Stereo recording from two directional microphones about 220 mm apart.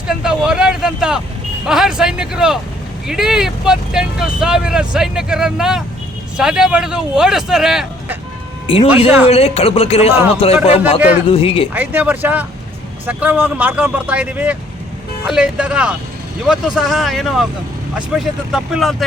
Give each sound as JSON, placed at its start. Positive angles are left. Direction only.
{"t": 0.1, "sound": "speech", "side_deg": -5}
{"t": 8.6, "sound": "speech", "side_deg": 25}
{"t": 11.7, "sound": "speech", "side_deg": -5}